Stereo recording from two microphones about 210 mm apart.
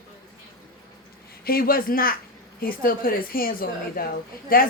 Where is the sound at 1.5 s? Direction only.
45° left (ahead or behind).